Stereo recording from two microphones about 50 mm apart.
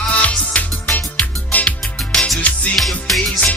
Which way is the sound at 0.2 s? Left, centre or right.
Left.